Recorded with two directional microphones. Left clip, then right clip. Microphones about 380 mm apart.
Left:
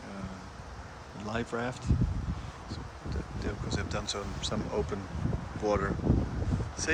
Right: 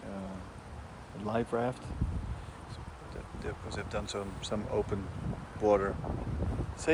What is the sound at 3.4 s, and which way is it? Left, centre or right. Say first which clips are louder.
Speech: left 3 dB; centre.